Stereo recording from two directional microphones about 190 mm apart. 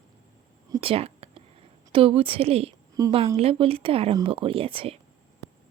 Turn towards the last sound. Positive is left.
turn(degrees=-30)  # may be behind; listen again after turning